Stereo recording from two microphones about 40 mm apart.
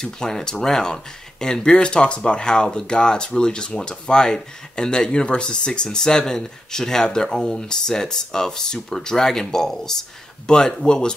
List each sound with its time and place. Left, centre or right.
0.0 s speech: centre